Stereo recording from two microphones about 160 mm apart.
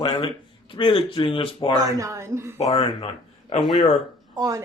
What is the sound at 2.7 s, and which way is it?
Speech, 25° left (ahead or behind).